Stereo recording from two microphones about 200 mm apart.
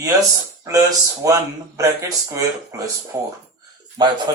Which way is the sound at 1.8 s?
15° right (ahead or behind).